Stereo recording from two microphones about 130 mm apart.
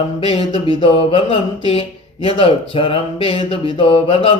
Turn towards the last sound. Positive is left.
turn(degrees=45)  # may be behind; listen again after turning